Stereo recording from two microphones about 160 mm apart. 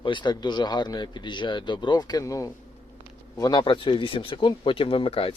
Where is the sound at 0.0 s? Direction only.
30° left (ahead or behind).